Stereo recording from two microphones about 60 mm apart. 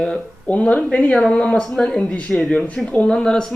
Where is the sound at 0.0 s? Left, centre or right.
Centre.